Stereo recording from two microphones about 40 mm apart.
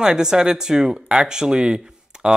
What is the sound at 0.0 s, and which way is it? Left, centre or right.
Speech, centre.